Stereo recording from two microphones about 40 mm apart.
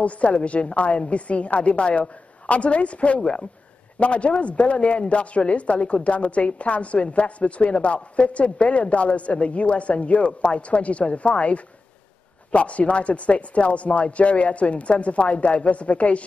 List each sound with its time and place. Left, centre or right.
0.0 s a woman's voice: left
3.2 s speech: left
4.0 s a woman's voice: left